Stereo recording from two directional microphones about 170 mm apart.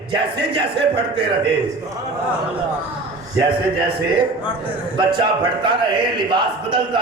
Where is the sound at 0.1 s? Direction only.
30° right (ahead or behind).